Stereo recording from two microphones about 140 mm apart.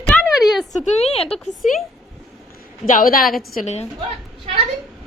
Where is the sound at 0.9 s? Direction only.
45° left (ahead or behind).